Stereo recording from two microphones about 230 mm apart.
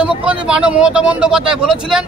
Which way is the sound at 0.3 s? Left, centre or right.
Centre.